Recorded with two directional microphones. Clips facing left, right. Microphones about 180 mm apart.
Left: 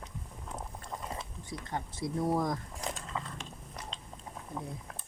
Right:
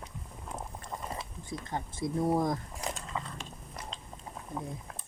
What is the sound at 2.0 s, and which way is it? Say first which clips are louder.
Speech: right 2 dB; 25° right (ahead or behind).